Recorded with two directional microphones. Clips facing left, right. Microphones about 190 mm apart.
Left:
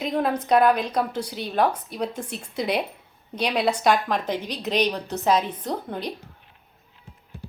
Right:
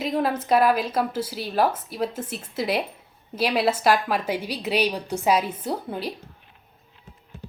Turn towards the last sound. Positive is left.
turn(degrees=-5)  # may be behind; listen again after turning